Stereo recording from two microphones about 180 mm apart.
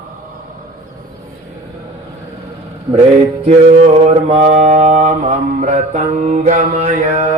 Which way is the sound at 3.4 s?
35° right (ahead or behind).